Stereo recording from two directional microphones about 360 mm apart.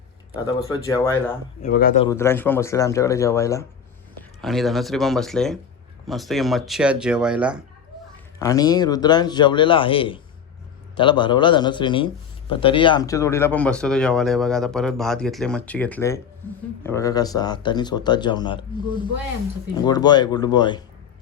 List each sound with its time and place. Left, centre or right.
0.3 s speech: centre
1.6 s speech: left
2.0 s a man's voice: centre
8.4 s a man's voice: centre